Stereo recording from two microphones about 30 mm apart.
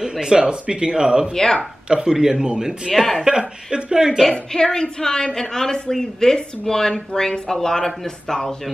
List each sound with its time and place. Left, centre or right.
0.1 s speech: right
1.3 s a woman's voice: centre
1.9 s speech: right
2.9 s speech: centre
3.3 s speech: right
4.3 s a woman's voice: left